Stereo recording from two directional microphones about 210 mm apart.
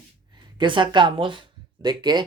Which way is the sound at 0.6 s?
20° right (ahead or behind).